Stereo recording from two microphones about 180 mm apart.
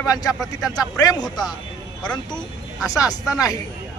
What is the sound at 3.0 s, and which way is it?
Speech, 20° left (ahead or behind).